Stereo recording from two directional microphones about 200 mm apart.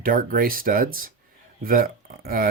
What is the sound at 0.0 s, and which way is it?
Speech, 45° right (ahead or behind).